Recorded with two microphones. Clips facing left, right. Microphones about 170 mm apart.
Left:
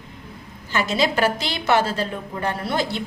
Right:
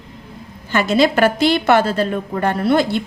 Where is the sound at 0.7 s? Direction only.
60° right (ahead or behind).